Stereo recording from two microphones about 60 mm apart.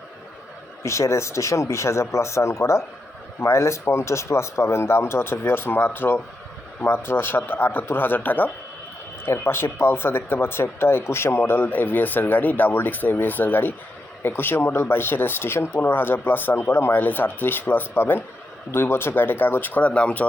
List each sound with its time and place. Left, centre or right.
0.8 s speech: left
9.2 s speech: left